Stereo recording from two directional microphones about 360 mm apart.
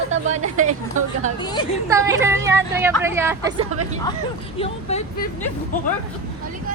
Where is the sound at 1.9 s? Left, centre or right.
Centre.